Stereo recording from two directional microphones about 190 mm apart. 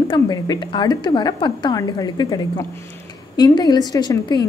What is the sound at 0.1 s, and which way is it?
A woman's voice, 20° left (ahead or behind).